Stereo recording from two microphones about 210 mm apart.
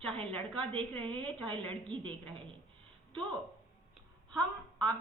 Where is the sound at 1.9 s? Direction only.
20° right (ahead or behind).